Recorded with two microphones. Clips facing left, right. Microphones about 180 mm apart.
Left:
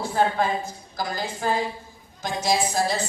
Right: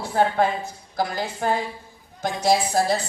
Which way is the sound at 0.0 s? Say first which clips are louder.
Right 2 dB; 65° right (ahead or behind).